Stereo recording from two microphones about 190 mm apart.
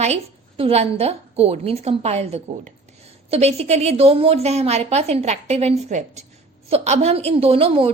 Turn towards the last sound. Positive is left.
turn(degrees=-30)  # may be behind; listen again after turning